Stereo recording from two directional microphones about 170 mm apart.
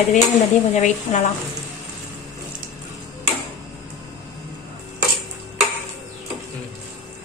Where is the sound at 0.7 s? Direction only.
45° left (ahead or behind).